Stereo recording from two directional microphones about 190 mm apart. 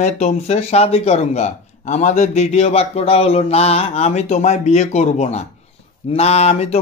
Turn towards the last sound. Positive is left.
turn(degrees=35)  # may be behind; listen again after turning